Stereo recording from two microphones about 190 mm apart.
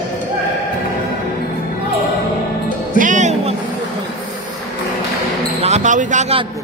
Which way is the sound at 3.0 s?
40° right (ahead or behind).